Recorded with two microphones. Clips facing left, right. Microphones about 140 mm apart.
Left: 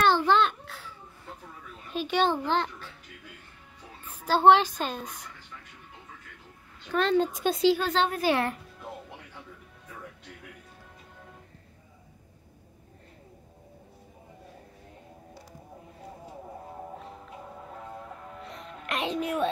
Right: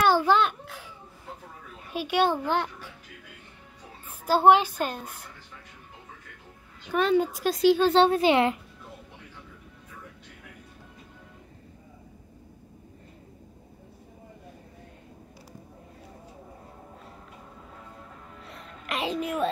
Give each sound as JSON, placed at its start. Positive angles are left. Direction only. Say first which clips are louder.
{"t": 0.0, "sound": "a sound", "louder": "right 1 dB", "side_deg": -10}
{"t": 1.9, "sound": "a child's voice", "louder": "right 1 dB", "side_deg": -10}
{"t": 4.3, "sound": "a child's voice", "louder": "even", "side_deg": -10}
{"t": 6.9, "sound": "a child's voice", "louder": "right 1 dB", "side_deg": -5}
{"t": 7.7, "sound": "a woman's voice", "louder": "right 7 dB", "side_deg": -30}
{"t": 18.4, "sound": "music", "louder": "left 3 dB", "side_deg": 0}